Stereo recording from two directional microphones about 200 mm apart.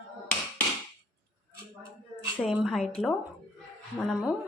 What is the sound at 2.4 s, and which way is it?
Speech, centre (ahead or behind).